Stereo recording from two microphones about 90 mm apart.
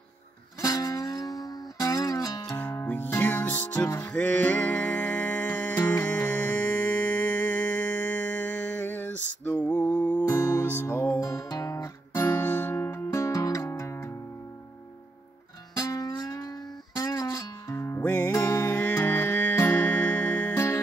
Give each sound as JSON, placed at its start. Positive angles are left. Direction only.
{"t": 0.6, "sound": "music", "side_deg": 40}
{"t": 2.5, "sound": "music", "side_deg": 30}
{"t": 10.2, "sound": "music", "side_deg": 30}
{"t": 11.1, "sound": "music", "side_deg": 35}
{"t": 12.2, "sound": "music", "side_deg": 25}
{"t": 15.7, "sound": "music", "side_deg": 40}
{"t": 17.7, "sound": "music", "side_deg": 30}